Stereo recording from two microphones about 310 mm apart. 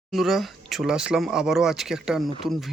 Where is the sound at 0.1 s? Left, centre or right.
Centre.